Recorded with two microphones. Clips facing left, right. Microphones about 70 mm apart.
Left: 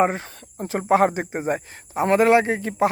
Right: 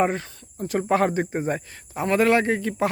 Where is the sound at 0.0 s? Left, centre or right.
Left.